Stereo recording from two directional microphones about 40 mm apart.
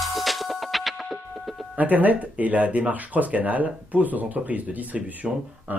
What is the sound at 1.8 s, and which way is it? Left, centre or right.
Speech, right.